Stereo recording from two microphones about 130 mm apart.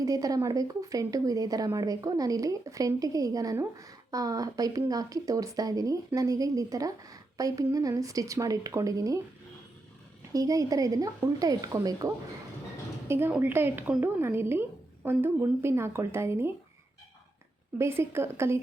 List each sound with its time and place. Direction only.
0.0 s a woman's voice: 25° right (ahead or behind)
10.3 s a woman's voice: 25° right (ahead or behind)
13.1 s a woman's voice: 15° right (ahead or behind)
17.7 s a woman's voice: 20° right (ahead or behind)